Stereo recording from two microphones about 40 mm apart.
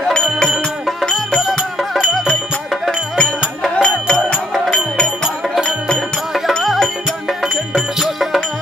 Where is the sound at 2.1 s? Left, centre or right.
Centre.